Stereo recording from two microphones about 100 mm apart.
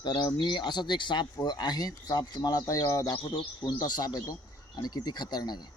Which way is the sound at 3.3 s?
45° left (ahead or behind).